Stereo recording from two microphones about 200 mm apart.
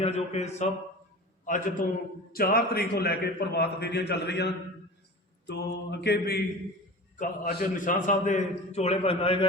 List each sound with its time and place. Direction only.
0.0 s a man's voice: 35° left (ahead or behind); by 4.5 s 55° left (ahead or behind)
5.5 s mantra: 60° left (ahead or behind)
7.2 s a man's voice: 40° left (ahead or behind)